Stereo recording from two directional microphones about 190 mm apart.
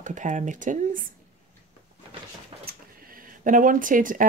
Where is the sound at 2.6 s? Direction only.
50° right (ahead or behind).